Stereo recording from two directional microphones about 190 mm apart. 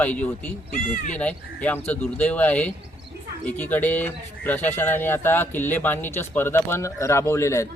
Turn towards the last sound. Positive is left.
turn(degrees=15)  # may be behind; listen again after turning